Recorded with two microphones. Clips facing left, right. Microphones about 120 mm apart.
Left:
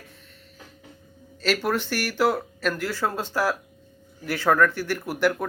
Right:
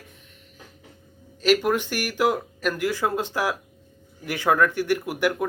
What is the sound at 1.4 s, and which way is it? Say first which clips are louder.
Speech: right 4 dB; 15° right (ahead or behind).